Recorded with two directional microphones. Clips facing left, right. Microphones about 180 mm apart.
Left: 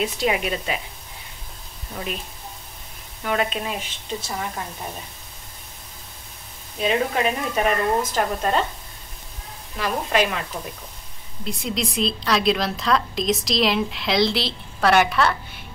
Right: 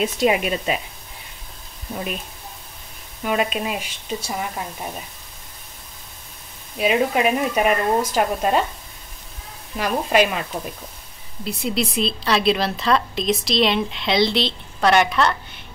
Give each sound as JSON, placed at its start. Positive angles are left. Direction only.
{"t": 0.0, "sound": "a woman's voice", "side_deg": -20}
{"t": 3.3, "sound": "speech", "side_deg": -15}
{"t": 6.8, "sound": "speech", "side_deg": -10}
{"t": 9.8, "sound": "speech", "side_deg": -15}
{"t": 11.4, "sound": "a woman's voice", "side_deg": -5}